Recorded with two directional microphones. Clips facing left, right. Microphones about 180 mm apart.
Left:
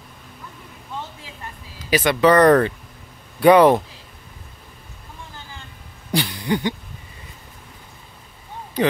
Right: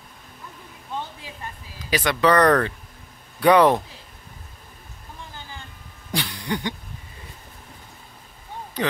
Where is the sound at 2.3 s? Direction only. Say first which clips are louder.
Left 4 dB; 20° left (ahead or behind).